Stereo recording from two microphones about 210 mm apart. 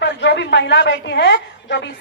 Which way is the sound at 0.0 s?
55° left (ahead or behind).